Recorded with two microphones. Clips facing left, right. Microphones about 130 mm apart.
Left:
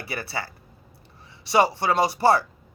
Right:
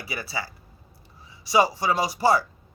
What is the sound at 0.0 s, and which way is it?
A man's voice, 60° left (ahead or behind).